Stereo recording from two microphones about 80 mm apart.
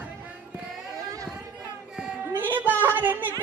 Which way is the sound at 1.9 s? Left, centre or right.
Centre.